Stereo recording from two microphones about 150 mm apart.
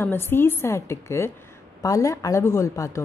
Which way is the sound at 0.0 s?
15° left (ahead or behind).